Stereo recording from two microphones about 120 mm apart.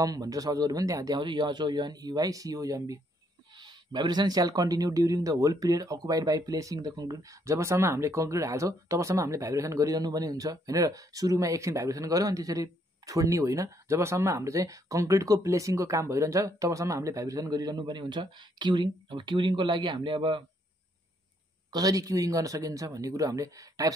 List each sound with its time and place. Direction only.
0.0 s speech: 30° right (ahead or behind)
21.6 s speech: 30° right (ahead or behind)